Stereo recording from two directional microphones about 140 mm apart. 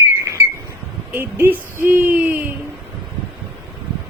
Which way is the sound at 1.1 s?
15° right (ahead or behind).